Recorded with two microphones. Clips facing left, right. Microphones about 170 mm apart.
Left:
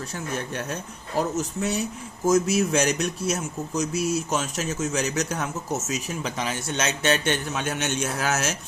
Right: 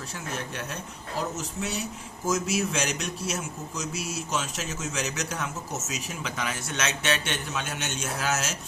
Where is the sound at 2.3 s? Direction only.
45° left (ahead or behind).